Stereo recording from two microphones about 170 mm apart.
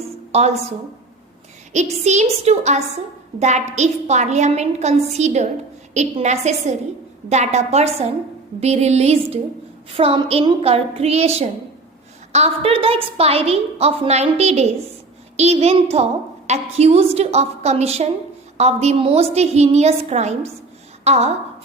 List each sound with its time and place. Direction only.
0.3 s a woman's voice: 40° right (ahead or behind)
2.0 s a woman's voice: 40° right (ahead or behind)